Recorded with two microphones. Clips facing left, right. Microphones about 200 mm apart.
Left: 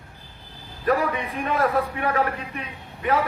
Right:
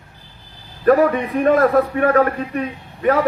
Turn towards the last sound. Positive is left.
turn(degrees=-50)  # may be behind; listen again after turning